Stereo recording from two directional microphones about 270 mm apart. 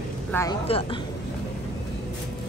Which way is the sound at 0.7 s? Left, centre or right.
Left.